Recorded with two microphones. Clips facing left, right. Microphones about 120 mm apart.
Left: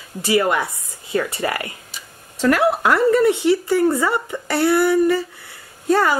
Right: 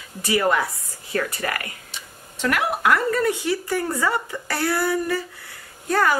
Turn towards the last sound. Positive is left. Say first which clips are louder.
# left 3 dB
turn(degrees=20)  # may be behind; listen again after turning